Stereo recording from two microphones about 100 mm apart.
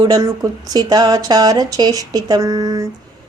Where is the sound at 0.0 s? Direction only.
40° right (ahead or behind).